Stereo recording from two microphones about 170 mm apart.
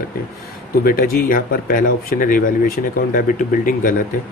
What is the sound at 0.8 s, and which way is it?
Speech, 60° left (ahead or behind).